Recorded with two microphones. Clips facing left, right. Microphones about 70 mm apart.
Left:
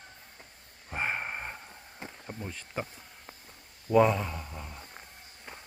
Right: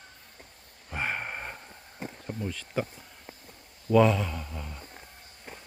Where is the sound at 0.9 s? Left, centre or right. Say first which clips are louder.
Even; centre.